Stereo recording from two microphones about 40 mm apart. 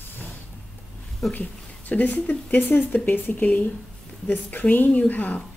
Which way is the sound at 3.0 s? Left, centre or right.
Left.